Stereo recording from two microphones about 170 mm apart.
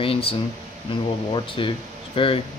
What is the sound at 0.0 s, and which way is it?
Speech, 35° left (ahead or behind).